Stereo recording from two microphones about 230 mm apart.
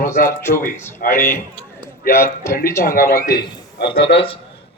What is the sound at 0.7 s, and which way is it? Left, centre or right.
A man's voice, centre.